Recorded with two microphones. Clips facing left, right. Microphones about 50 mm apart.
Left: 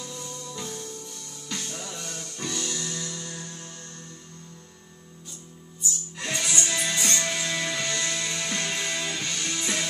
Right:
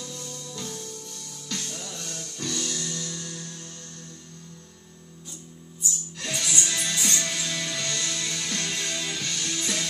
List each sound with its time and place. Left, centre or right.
0.0 s music: centre
6.1 s music: centre